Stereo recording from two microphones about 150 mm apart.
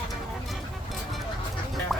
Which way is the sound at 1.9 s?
Centre (ahead or behind).